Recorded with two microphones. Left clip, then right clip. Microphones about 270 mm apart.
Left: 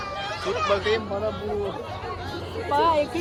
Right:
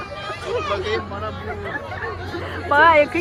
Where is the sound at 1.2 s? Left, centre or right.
Centre.